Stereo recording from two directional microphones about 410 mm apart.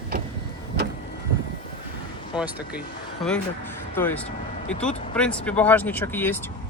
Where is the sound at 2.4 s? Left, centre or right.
Centre.